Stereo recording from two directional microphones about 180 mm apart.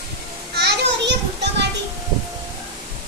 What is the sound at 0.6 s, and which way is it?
Children playing, 65° right (ahead or behind).